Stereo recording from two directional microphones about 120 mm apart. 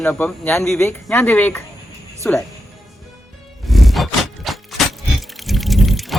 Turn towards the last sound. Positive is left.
turn(degrees=0)  # may be behind; listen again after turning